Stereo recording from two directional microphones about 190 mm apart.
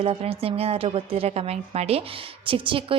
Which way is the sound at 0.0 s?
30° right (ahead or behind).